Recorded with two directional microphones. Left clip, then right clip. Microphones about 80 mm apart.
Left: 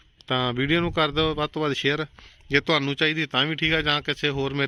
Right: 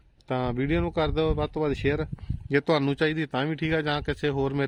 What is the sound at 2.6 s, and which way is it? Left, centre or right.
Speech, right.